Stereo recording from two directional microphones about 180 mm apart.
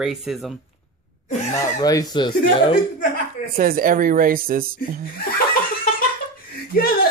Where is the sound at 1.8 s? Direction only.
20° left (ahead or behind).